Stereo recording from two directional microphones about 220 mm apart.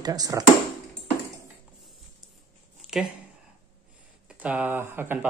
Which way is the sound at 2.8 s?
5° right (ahead or behind).